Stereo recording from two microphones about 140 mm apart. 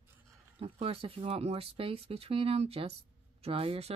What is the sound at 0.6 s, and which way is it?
Speech, 45° right (ahead or behind).